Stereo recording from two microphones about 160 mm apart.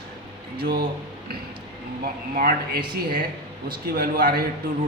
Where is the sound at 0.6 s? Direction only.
65° right (ahead or behind).